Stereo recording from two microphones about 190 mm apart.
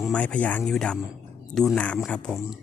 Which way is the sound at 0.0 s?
5° left (ahead or behind).